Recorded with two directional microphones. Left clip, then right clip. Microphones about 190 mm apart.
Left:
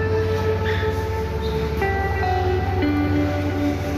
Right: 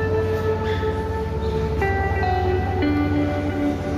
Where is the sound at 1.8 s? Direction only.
Centre (ahead or behind).